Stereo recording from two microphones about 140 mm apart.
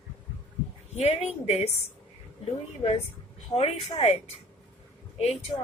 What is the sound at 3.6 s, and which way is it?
A woman's voice, 45° left (ahead or behind).